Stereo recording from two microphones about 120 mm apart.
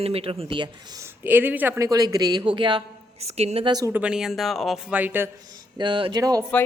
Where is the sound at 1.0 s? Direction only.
15° right (ahead or behind); by 2.8 s 45° right (ahead or behind).